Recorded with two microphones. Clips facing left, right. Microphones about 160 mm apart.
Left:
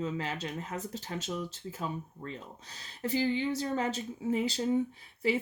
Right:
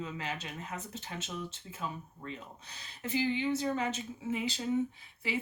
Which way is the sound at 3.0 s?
40° left (ahead or behind).